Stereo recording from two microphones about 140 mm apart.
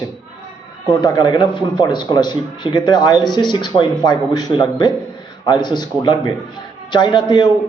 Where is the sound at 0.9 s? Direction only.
30° left (ahead or behind).